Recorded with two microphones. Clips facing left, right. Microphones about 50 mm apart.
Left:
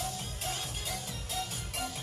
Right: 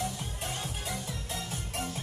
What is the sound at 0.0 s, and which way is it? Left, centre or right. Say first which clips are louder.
Music: right 2 dB; right.